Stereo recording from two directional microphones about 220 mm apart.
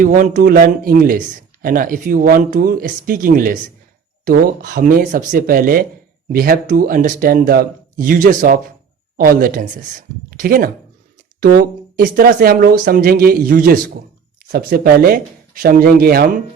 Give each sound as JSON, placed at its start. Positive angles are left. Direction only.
{"t": 0.0, "sound": "speech", "side_deg": -35}